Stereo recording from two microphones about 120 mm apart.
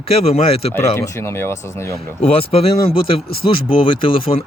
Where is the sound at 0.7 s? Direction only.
20° left (ahead or behind).